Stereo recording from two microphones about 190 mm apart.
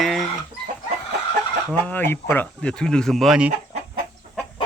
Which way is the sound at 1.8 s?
10° left (ahead or behind).